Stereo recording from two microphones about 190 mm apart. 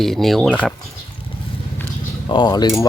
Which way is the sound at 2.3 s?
25° left (ahead or behind).